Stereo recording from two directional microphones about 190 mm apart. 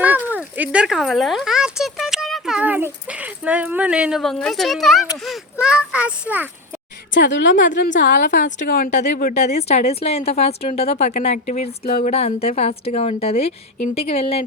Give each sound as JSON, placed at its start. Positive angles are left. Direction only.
{"t": 0.0, "sound": "speech", "side_deg": -10}
{"t": 5.1, "sound": "a sound", "side_deg": 0}
{"t": 7.1, "sound": "a woman's voice", "side_deg": 70}
{"t": 7.7, "sound": "a woman's voice", "side_deg": 40}
{"t": 9.3, "sound": "a woman's voice", "side_deg": 35}
{"t": 11.8, "sound": "a woman's voice", "side_deg": 50}
{"t": 12.1, "sound": "a woman's voice", "side_deg": 35}